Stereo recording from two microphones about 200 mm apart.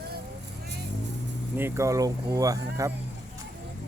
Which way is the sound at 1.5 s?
10° right (ahead or behind).